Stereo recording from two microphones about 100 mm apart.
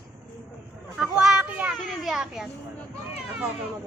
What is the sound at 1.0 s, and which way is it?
Speech, 5° right (ahead or behind).